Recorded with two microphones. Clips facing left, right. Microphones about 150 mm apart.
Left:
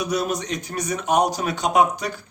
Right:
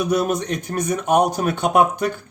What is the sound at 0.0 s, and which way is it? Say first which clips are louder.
Speech: right 4 dB; 50° right (ahead or behind).